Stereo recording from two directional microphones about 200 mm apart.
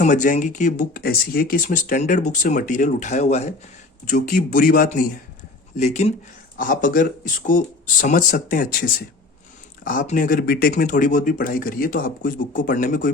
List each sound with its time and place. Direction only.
0.0 s speech: 40° left (ahead or behind)